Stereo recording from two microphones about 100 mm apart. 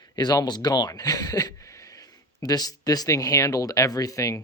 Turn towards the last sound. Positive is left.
turn(degrees=35)  # may be behind; listen again after turning